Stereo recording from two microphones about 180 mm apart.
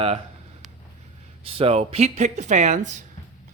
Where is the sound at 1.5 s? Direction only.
35° right (ahead or behind).